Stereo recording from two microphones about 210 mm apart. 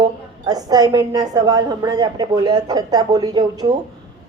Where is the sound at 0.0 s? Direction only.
20° right (ahead or behind).